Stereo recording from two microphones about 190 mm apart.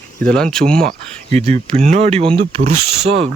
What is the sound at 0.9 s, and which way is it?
Speech, 35° right (ahead or behind).